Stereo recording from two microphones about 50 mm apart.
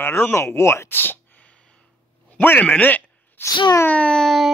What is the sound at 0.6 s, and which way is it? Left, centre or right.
Speech, left.